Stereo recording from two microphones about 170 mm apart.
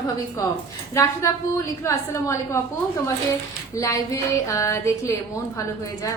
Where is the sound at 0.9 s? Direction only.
20° left (ahead or behind).